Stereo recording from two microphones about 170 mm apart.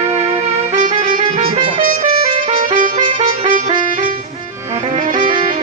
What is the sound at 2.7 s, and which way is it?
Music, 50° right (ahead or behind).